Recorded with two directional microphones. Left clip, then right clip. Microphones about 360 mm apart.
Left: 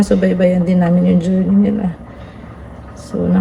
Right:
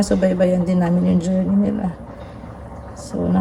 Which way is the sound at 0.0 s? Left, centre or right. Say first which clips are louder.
Left 3 dB; centre.